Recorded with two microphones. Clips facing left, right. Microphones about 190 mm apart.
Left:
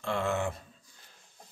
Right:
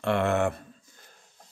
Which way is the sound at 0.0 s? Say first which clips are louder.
Right 6 dB; 65° right (ahead or behind).